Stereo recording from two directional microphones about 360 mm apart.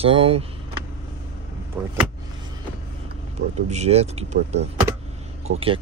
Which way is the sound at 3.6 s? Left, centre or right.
Centre.